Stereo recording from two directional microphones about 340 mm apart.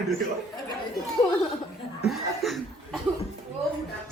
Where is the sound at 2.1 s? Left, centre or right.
Centre.